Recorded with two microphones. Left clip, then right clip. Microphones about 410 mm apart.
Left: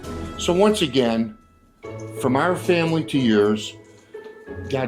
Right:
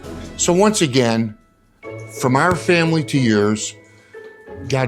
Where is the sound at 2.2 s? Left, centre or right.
Right.